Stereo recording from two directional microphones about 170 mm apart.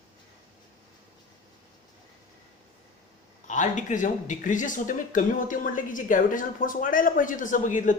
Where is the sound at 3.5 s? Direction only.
45° left (ahead or behind).